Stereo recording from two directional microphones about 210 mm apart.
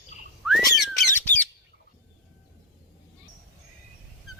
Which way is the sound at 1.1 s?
10° left (ahead or behind).